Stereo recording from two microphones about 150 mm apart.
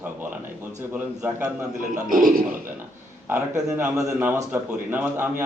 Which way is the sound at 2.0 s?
65° right (ahead or behind).